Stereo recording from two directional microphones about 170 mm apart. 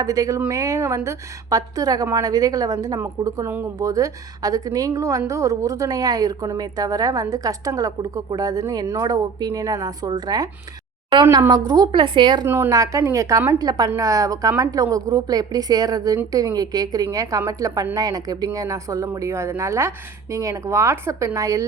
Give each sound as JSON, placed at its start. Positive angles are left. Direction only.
{"t": 0.0, "sound": "a woman's voice", "side_deg": -20}
{"t": 12.5, "sound": "a woman's voice", "side_deg": -15}